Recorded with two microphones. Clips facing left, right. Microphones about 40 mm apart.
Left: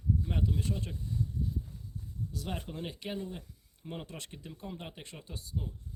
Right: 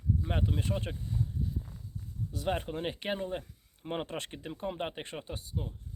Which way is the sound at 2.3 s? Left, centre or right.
Right.